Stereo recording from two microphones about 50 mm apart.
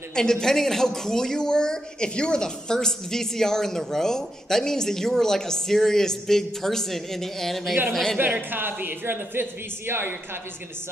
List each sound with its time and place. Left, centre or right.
0.1 s speech: centre
8.2 s speech: right